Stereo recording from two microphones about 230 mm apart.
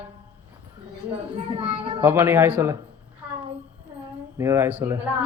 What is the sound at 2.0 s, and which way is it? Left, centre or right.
Speech, centre.